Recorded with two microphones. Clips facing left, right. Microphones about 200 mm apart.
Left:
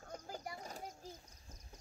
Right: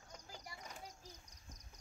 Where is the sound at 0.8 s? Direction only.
50° left (ahead or behind).